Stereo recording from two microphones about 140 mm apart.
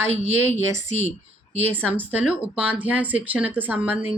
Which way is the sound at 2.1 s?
10° right (ahead or behind).